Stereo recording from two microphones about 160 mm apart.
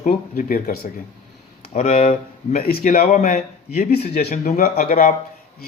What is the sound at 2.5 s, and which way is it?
A man's voice, 65° left (ahead or behind).